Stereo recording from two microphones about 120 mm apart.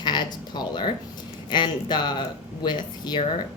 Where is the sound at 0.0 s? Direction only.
35° left (ahead or behind).